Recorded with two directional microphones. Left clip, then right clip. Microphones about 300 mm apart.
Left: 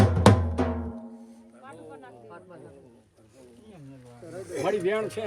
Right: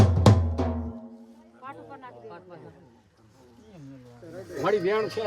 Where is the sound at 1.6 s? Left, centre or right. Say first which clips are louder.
Right 3 dB; right.